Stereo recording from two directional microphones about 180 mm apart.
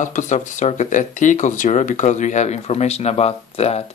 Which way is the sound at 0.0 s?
45° left (ahead or behind).